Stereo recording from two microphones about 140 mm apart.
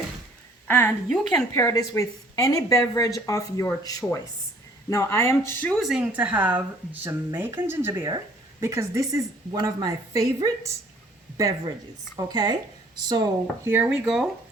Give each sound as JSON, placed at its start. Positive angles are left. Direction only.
{"t": 1.1, "sound": "speech", "side_deg": 5}
{"t": 1.5, "sound": "speech", "side_deg": 25}
{"t": 5.8, "sound": "speech", "side_deg": -5}
{"t": 13.7, "sound": "speech", "side_deg": -15}